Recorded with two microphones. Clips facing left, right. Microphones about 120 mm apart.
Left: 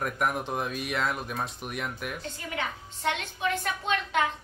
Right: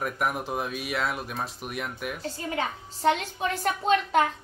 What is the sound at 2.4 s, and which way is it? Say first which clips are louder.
A woman's voice: right 5 dB; 30° right (ahead or behind).